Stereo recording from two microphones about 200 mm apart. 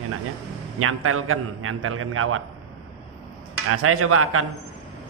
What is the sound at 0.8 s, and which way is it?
Speech, 90° right.